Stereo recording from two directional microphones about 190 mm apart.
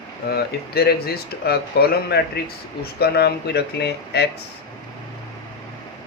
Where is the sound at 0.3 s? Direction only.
55° left (ahead or behind).